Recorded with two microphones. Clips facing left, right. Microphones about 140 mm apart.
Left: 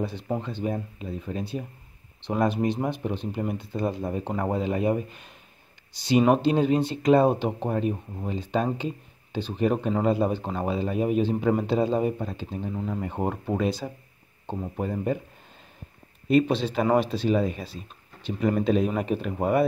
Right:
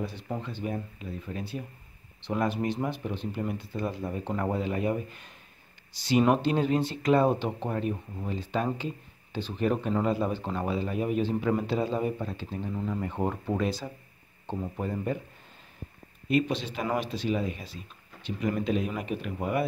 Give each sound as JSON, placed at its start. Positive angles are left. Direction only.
{"t": 0.0, "sound": "speech", "side_deg": 25}
{"t": 12.4, "sound": "speech", "side_deg": 15}
{"t": 12.7, "sound": "speech", "side_deg": 25}
{"t": 14.4, "sound": "a sound", "side_deg": 15}
{"t": 14.8, "sound": "speech", "side_deg": 20}
{"t": 16.3, "sound": "speech", "side_deg": 35}